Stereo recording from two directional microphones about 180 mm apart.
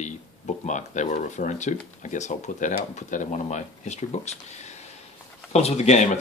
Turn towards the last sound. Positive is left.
turn(degrees=40)  # may be behind; listen again after turning